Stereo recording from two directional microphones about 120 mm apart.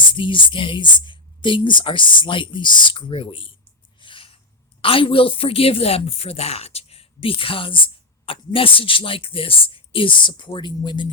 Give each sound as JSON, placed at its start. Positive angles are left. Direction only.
{"t": 0.1, "sound": "speech", "side_deg": 45}
{"t": 4.0, "sound": "a sound", "side_deg": 45}
{"t": 4.8, "sound": "speech", "side_deg": 50}